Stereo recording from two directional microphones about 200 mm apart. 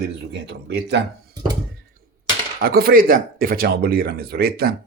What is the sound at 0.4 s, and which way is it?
Speech, 55° right (ahead or behind).